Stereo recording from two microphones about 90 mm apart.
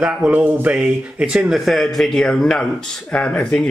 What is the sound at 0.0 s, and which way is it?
Speech, 10° right (ahead or behind).